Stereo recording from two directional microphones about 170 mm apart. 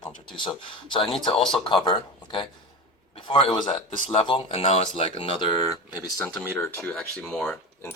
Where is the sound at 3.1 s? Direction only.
30° left (ahead or behind).